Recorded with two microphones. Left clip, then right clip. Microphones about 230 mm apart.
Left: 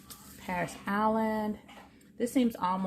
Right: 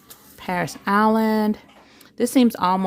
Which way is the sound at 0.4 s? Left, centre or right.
Right.